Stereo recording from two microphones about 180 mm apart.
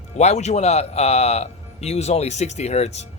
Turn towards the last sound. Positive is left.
turn(degrees=35)  # may be behind; listen again after turning